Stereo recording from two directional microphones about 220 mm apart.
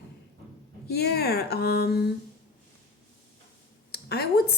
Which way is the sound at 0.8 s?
45° left (ahead or behind).